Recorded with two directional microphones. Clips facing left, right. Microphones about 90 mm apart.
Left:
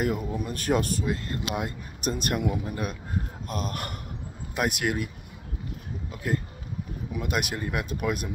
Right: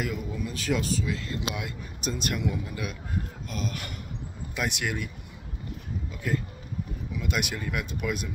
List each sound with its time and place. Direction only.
0.0 s speech: 45° left (ahead or behind)
7.2 s speech: 40° left (ahead or behind)